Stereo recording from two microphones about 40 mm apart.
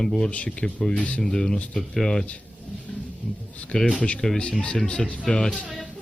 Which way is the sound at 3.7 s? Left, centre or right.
Centre.